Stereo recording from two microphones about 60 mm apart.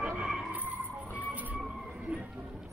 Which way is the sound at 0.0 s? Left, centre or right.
Centre.